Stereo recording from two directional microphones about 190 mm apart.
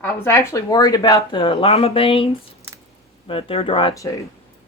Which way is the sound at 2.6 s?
15° right (ahead or behind).